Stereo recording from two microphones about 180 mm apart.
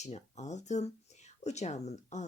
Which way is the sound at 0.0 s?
40° left (ahead or behind).